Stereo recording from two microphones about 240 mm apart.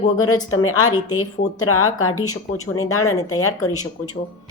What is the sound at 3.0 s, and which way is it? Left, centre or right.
Speech, centre.